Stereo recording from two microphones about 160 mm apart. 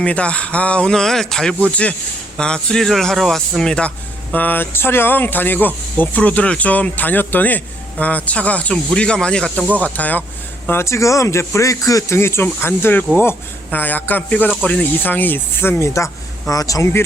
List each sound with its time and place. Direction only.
0.0 s a man's voice: 5° left (ahead or behind)